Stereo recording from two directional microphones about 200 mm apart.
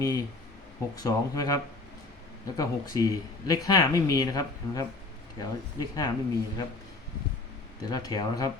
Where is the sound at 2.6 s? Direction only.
20° left (ahead or behind).